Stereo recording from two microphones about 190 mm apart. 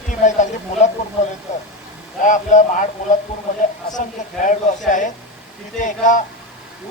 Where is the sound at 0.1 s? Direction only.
40° left (ahead or behind).